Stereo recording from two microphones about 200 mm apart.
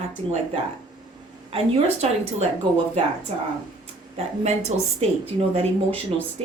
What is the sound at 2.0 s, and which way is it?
Speech, 35° right (ahead or behind).